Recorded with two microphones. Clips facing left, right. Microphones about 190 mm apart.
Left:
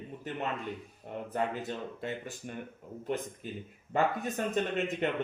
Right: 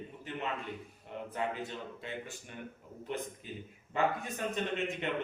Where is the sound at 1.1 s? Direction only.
45° left (ahead or behind).